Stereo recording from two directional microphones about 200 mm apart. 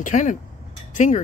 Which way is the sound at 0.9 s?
40° left (ahead or behind).